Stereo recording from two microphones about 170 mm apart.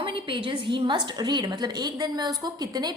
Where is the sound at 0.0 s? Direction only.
30° right (ahead or behind).